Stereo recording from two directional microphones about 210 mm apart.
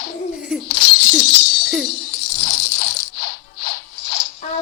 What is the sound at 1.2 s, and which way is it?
Jingle bell, 45° left (ahead or behind).